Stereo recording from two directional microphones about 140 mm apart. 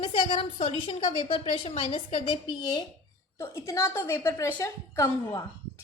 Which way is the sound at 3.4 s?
20° left (ahead or behind).